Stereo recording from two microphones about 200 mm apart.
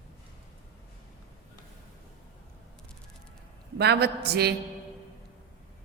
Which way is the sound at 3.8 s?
55° right (ahead or behind).